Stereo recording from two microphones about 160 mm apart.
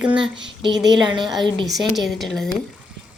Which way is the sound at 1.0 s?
30° right (ahead or behind).